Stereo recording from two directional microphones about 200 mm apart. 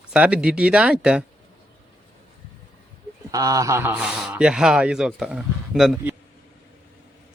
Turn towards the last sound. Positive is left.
turn(degrees=-5)  # may be behind; listen again after turning